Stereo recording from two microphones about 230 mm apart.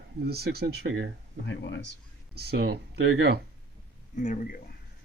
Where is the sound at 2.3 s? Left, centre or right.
Right.